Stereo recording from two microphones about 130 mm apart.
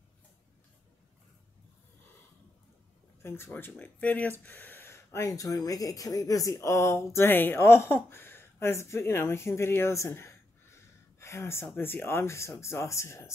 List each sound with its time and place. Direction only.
3.2 s speech: 20° left (ahead or behind)